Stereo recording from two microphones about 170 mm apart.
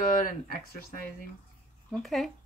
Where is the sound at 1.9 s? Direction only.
Centre (ahead or behind).